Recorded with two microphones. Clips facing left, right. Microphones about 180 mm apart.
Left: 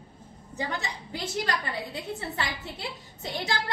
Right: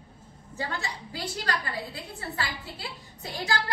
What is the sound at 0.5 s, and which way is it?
A woman's voice, 20° left (ahead or behind).